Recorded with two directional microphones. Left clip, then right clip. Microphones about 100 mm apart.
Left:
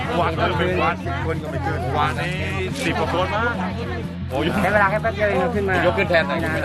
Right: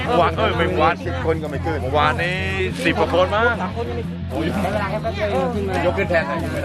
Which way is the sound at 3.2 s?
55° right (ahead or behind).